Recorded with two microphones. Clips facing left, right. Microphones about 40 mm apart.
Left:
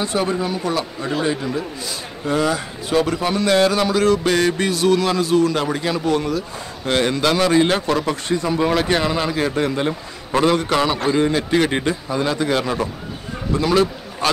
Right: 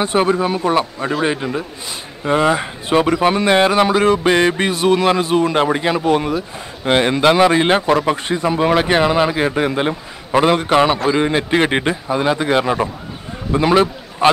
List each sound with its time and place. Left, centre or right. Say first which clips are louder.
0.0 s a man's voice: right 5 dB; right